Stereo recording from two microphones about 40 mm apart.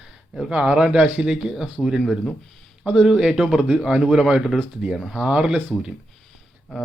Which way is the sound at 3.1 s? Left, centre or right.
Centre.